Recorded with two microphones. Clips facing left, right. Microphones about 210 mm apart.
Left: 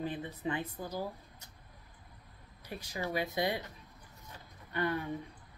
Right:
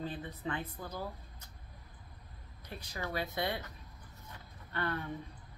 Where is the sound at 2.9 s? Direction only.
15° left (ahead or behind).